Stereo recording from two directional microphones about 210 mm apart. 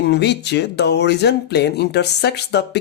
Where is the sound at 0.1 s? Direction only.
55° left (ahead or behind).